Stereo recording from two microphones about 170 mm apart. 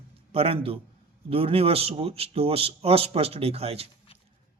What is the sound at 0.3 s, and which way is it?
Speech, 35° right (ahead or behind).